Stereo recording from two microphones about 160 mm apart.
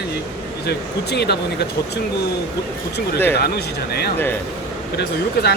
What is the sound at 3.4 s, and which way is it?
Speech, 80° left.